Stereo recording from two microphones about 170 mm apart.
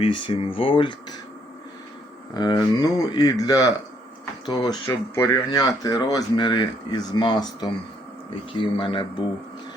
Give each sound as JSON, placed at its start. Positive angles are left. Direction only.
{"t": 0.0, "sound": "speech", "side_deg": 30}
{"t": 2.3, "sound": "speech", "side_deg": 25}